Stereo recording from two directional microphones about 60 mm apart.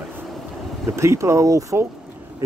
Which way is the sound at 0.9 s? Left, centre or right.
Right.